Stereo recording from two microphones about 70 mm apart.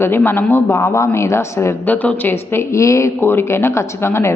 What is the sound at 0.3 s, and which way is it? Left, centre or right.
Speech, left.